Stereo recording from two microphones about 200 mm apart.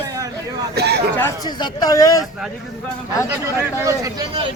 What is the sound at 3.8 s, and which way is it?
Speech, 20° right (ahead or behind).